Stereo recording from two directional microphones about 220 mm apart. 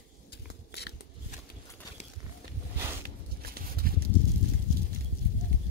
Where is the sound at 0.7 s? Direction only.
50° left (ahead or behind).